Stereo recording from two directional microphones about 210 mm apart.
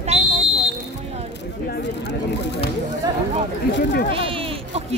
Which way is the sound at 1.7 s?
55° left (ahead or behind).